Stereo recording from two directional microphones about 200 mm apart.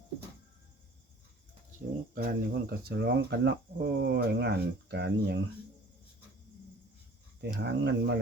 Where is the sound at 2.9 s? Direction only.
55° right (ahead or behind).